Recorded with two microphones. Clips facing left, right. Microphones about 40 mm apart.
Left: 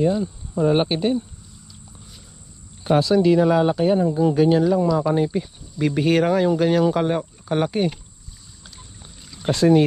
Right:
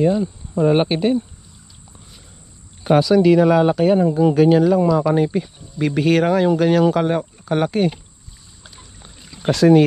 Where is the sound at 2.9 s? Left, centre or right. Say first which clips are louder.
Right 3 dB; right.